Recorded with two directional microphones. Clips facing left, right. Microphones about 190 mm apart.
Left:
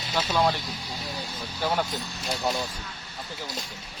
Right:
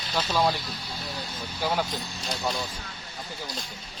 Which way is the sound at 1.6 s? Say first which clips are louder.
Left 1 dB; centre (ahead or behind).